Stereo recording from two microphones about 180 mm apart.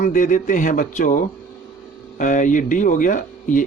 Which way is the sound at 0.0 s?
45° left (ahead or behind).